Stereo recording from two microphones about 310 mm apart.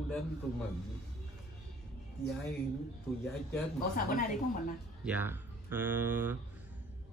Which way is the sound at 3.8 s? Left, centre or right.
Left.